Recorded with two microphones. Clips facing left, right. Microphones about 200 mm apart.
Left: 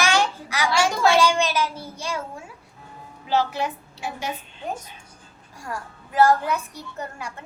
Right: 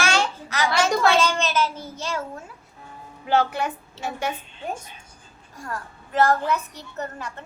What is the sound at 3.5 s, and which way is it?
Speech, 50° right (ahead or behind).